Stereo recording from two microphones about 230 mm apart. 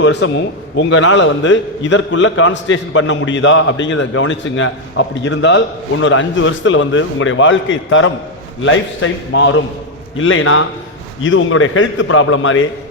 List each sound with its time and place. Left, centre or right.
0.0 s a man's voice: left